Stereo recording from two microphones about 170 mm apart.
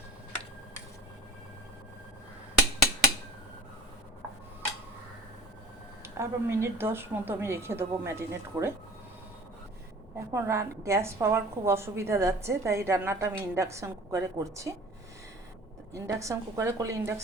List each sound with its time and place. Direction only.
6.0 s a woman's voice: 15° right (ahead or behind)
10.2 s a woman's voice: 15° right (ahead or behind)
16.0 s a woman's voice: 20° right (ahead or behind)